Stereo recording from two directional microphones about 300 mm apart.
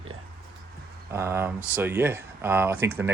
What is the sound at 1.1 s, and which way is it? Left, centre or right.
Speech, centre.